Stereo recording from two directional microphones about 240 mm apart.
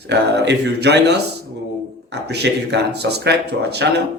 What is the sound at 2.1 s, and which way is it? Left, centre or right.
A man's voice, right.